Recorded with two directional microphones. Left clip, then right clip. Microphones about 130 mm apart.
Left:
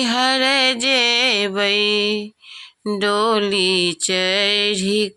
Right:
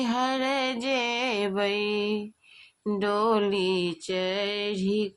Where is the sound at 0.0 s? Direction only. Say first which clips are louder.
Left 10 dB; 20° left (ahead or behind).